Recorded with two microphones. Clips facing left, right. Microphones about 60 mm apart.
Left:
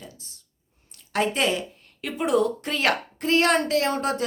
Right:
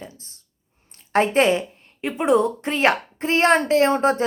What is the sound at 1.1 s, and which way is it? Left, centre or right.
A woman's voice, right.